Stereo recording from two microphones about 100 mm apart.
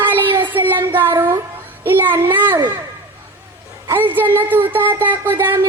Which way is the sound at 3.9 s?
20° right (ahead or behind).